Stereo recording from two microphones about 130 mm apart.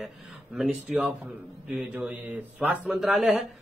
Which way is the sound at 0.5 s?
5° right (ahead or behind).